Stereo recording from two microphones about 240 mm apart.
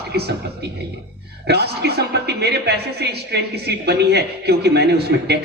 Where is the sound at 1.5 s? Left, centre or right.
Right.